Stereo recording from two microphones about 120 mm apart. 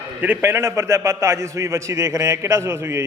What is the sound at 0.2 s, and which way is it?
A man's voice, 15° right (ahead or behind).